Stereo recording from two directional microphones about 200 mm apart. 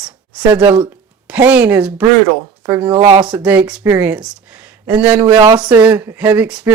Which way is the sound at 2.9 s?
30° right (ahead or behind).